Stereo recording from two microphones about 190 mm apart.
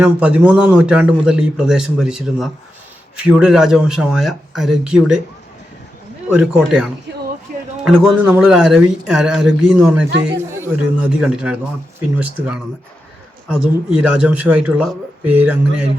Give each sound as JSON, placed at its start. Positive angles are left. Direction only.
{"t": 0.0, "sound": "a man's voice", "side_deg": -5}
{"t": 6.3, "sound": "a man's voice", "side_deg": -5}